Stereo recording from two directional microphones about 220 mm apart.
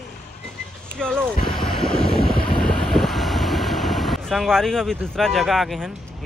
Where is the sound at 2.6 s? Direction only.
5° left (ahead or behind).